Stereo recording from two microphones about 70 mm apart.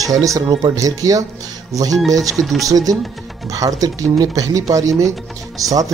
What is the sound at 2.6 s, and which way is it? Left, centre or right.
Speech, right.